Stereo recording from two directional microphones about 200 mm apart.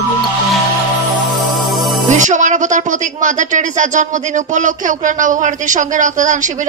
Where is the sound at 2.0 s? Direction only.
40° right (ahead or behind).